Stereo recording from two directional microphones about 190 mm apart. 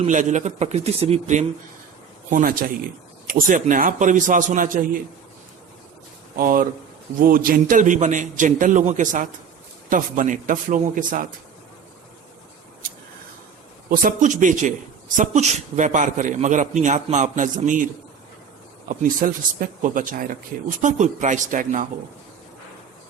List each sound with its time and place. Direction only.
0.0 s a man's voice: 40° right (ahead or behind)
2.3 s speech: 45° right (ahead or behind)
6.3 s speech: 50° right (ahead or behind)
13.9 s a man's voice: 45° right (ahead or behind)
18.9 s speech: 45° right (ahead or behind)